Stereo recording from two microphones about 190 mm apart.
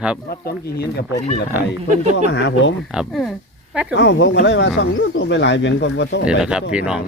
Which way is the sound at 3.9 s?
65° left (ahead or behind).